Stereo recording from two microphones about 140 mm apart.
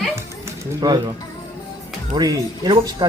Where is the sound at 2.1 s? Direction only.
30° right (ahead or behind).